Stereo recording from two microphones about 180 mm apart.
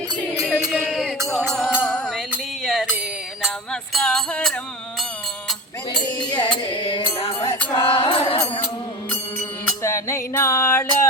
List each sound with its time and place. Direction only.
0.4 s music: centre (ahead or behind)
5.9 s music: 25° left (ahead or behind)
9.8 s music: 15° left (ahead or behind)